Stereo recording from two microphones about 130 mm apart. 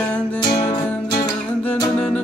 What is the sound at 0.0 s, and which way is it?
Music, 10° left (ahead or behind).